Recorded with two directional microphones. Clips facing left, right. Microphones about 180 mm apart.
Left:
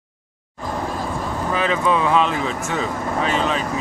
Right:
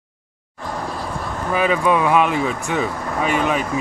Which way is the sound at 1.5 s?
15° right (ahead or behind).